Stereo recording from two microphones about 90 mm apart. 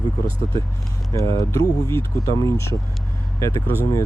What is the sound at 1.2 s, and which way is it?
Speech, 40° left (ahead or behind).